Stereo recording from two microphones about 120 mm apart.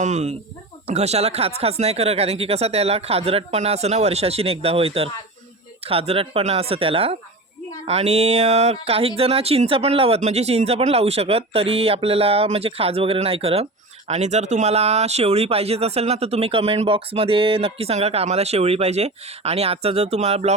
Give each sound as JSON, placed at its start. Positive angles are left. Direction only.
{"t": 0.0, "sound": "speech", "side_deg": -65}
{"t": 10.2, "sound": "speech", "side_deg": -65}
{"t": 14.1, "sound": "speech", "side_deg": -70}